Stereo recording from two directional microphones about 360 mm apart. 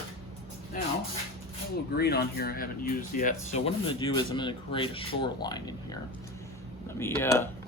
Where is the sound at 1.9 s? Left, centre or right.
Left; by 7.4 s centre.